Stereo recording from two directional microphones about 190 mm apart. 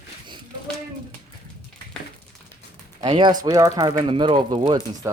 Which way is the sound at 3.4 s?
20° right (ahead or behind).